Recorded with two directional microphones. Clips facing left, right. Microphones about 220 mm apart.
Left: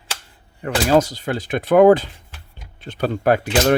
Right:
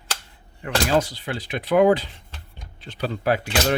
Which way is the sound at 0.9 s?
45° left (ahead or behind).